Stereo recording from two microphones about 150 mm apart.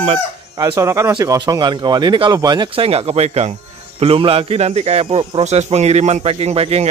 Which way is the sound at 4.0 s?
40° right (ahead or behind).